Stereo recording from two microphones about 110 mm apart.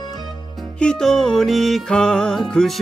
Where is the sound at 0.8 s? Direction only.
5° left (ahead or behind).